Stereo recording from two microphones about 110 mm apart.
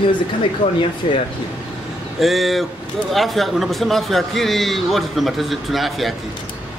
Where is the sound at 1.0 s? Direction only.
70° left (ahead or behind).